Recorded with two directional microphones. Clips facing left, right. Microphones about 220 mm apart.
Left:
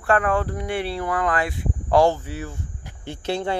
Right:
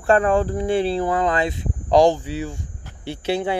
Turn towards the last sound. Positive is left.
turn(degrees=-10)  # may be behind; listen again after turning